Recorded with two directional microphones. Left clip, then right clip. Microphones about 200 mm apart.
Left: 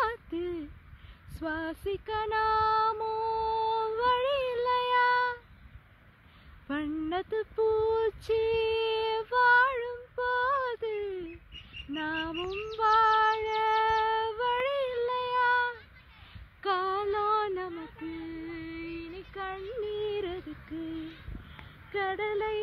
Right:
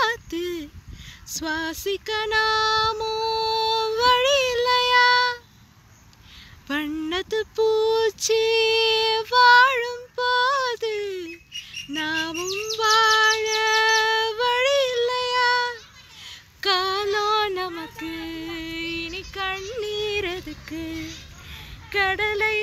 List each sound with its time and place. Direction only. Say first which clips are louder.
0.0 s a sound: right 7 dB; 30° left (ahead or behind)
1.4 s female singing: right 7 dB; 30° left (ahead or behind)
6.7 s a sound: right 6 dB; 25° left (ahead or behind)
11.9 s child singing: right 7 dB; 30° left (ahead or behind)
12.7 s bird: right 5 dB; 30° left (ahead or behind)
16.6 s female singing: right 7 dB; 30° left (ahead or behind)
18.2 s female singing: right 8 dB; 5° left (ahead or behind)
21.9 s speech: right 9 dB; 15° left (ahead or behind)